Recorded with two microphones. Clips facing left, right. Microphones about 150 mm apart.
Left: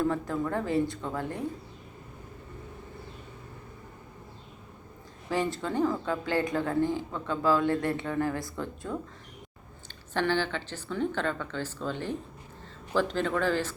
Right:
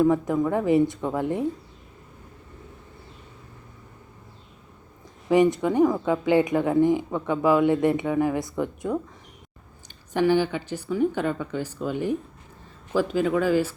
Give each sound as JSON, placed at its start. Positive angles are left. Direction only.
{"t": 0.0, "sound": "speech", "side_deg": -15}
{"t": 5.3, "sound": "a woman's voice", "side_deg": -20}
{"t": 10.1, "sound": "a woman's voice", "side_deg": -15}